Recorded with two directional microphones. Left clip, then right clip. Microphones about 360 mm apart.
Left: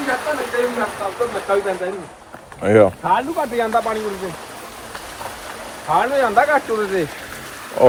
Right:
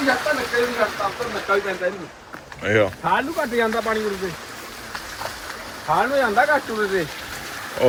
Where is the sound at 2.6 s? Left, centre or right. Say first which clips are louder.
Left 6 dB; centre.